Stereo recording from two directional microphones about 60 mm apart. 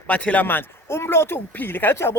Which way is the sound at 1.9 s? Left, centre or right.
Left.